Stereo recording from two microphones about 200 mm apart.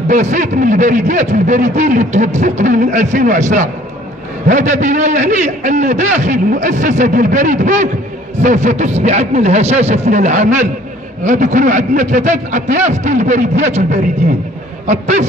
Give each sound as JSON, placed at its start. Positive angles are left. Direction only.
{"t": 0.1, "sound": "speech", "side_deg": -40}